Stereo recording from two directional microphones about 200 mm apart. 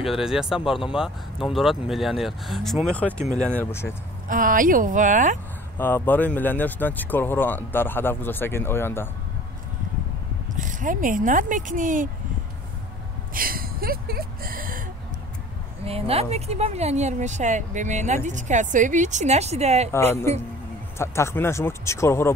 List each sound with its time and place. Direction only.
0.0 s speech: centre (ahead or behind)
4.3 s speech: 45° right (ahead or behind)
5.8 s speech: 10° left (ahead or behind)
10.5 s speech: 40° right (ahead or behind)
13.3 s speech: 45° right (ahead or behind)
15.8 s speech: 30° right (ahead or behind)
19.9 s speech: 10° left (ahead or behind)